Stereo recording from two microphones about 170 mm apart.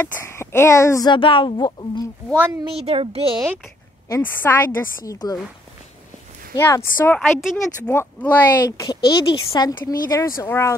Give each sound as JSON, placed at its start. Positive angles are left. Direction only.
{"t": 0.0, "sound": "speech", "side_deg": 15}
{"t": 2.3, "sound": "speech", "side_deg": -10}
{"t": 2.8, "sound": "a child's voice", "side_deg": -35}
{"t": 4.1, "sound": "speech", "side_deg": 10}
{"t": 6.5, "sound": "speech", "side_deg": 15}
{"t": 7.2, "sound": "a woman's voice", "side_deg": 0}
{"t": 7.9, "sound": "speech", "side_deg": 10}
{"t": 8.6, "sound": "speech", "side_deg": 25}